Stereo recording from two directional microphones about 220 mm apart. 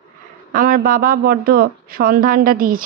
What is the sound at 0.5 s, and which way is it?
Speech, 40° right (ahead or behind).